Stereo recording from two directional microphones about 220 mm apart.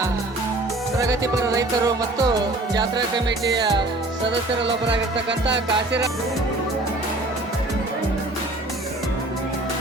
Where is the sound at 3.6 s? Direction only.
20° right (ahead or behind).